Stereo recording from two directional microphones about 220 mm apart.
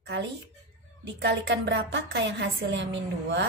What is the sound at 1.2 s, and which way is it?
Speech, 50° right (ahead or behind).